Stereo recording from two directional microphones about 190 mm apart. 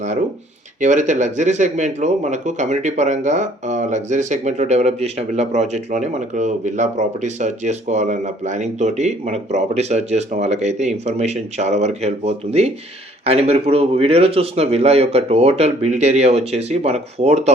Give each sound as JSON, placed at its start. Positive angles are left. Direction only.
{"t": 0.8, "sound": "speech", "side_deg": -40}